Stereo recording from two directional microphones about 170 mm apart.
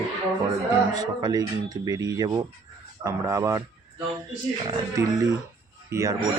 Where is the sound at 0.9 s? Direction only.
25° right (ahead or behind).